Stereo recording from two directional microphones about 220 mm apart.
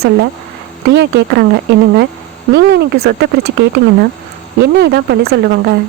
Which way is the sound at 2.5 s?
50° right (ahead or behind).